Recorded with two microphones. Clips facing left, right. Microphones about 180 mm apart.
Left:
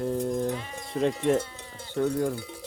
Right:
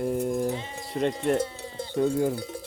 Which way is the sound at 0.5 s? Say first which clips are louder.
Right 1 dB; 25° right (ahead or behind).